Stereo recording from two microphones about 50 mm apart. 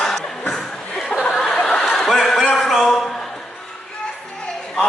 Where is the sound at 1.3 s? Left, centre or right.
Centre.